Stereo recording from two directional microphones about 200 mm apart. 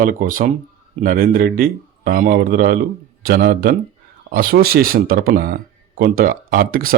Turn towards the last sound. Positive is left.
turn(degrees=-45)  # may be behind; listen again after turning